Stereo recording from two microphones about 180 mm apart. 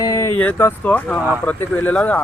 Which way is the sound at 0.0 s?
15° left (ahead or behind).